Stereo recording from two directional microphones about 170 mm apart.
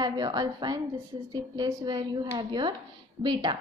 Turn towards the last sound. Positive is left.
turn(degrees=-25)  # may be behind; listen again after turning